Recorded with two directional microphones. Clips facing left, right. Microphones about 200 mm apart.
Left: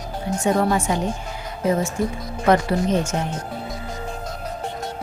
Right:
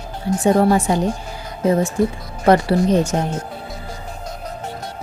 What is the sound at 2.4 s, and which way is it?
Speech, 35° right (ahead or behind).